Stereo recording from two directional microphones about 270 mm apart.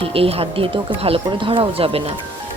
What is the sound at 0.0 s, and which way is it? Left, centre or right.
Speech, right.